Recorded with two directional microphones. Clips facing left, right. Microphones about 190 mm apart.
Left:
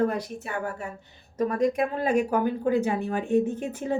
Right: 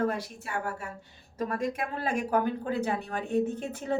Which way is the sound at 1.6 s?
15° left (ahead or behind).